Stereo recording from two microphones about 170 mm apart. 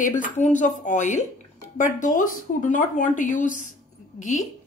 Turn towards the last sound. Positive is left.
turn(degrees=45)  # may be behind; listen again after turning